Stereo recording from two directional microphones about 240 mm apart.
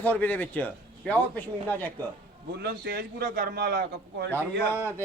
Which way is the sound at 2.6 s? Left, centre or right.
Right.